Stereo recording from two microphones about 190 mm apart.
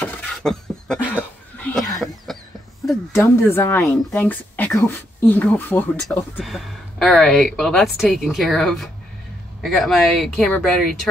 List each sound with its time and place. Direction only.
0.0 s beatboxing: 5° left (ahead or behind)
1.6 s a sound: 10° left (ahead or behind)
3.1 s speech: 15° left (ahead or behind)